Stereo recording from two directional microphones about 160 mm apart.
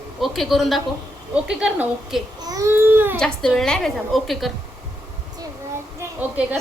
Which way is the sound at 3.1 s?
5° left (ahead or behind).